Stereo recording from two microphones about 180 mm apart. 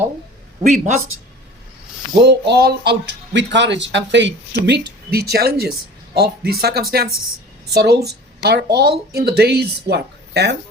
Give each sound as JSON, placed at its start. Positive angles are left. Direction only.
{"t": 0.6, "sound": "speech", "side_deg": -45}
{"t": 2.5, "sound": "speech", "side_deg": -65}
{"t": 4.6, "sound": "speech", "side_deg": -65}